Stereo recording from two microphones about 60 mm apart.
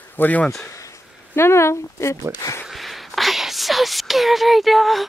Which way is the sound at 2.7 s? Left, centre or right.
Centre.